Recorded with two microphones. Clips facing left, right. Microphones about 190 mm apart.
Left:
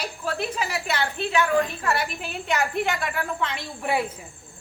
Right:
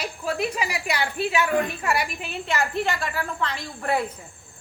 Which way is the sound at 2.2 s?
Centre (ahead or behind).